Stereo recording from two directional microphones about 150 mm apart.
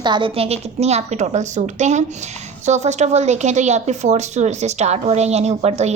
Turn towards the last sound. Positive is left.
turn(degrees=-50)  # may be behind; listen again after turning